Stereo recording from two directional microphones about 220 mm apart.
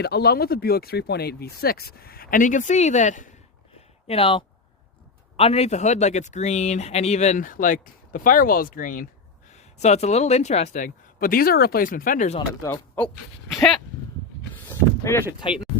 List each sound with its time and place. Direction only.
0.0 s speech: 45° left (ahead or behind)
12.6 s speech: 10° left (ahead or behind)
13.5 s dog: centre (ahead or behind)
14.5 s a sound: 10° left (ahead or behind)